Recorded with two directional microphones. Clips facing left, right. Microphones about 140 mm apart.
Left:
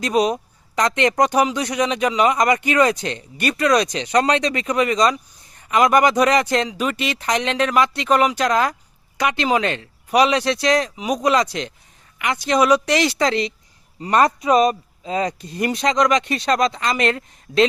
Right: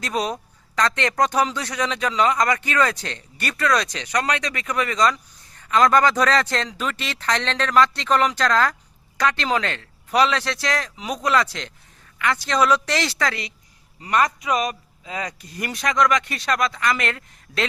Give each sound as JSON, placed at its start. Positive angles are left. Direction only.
{"t": 0.0, "sound": "a man's voice", "side_deg": 15}